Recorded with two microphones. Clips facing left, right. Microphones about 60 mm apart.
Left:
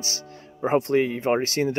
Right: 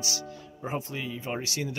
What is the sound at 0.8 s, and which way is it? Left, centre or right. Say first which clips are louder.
Speech: left 13 dB; left.